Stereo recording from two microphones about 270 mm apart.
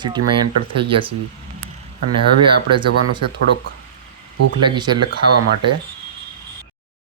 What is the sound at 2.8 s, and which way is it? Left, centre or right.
Speech, right.